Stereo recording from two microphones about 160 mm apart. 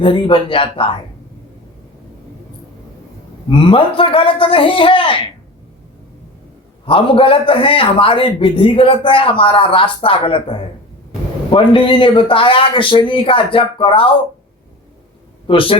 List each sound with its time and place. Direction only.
0.0 s a man's voice: 30° left (ahead or behind)
3.7 s a man's voice: 35° left (ahead or behind)
6.8 s a man's voice: 35° left (ahead or behind)
15.4 s a man's voice: 35° left (ahead or behind)